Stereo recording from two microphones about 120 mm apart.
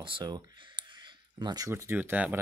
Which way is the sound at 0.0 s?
40° right (ahead or behind).